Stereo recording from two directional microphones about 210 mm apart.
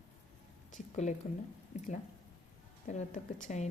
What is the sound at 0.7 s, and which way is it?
Speech, 35° left (ahead or behind).